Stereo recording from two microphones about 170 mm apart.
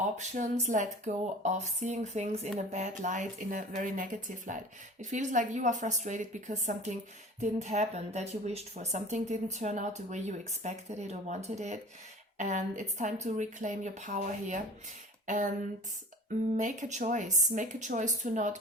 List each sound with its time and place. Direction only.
0.0 s speech: 45° right (ahead or behind)
16.6 s speech: 45° right (ahead or behind)